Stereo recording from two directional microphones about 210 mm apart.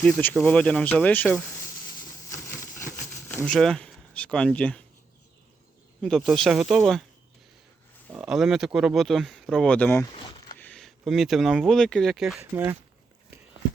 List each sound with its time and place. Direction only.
0.0 s speech: 5° left (ahead or behind)
2.6 s a sound: 10° left (ahead or behind)
3.2 s speech: 10° left (ahead or behind)
6.0 s speech: centre (ahead or behind)
8.1 s speech: centre (ahead or behind)
10.1 s a sound: 25° left (ahead or behind)
10.6 s speech: 5° left (ahead or behind)